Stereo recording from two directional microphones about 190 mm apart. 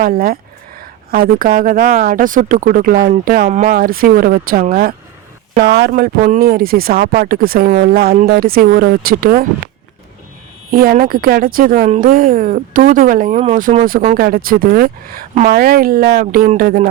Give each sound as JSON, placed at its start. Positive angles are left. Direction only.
{"t": 0.0, "sound": "speech", "side_deg": -50}
{"t": 5.9, "sound": "speech", "side_deg": -40}
{"t": 10.7, "sound": "speech", "side_deg": -50}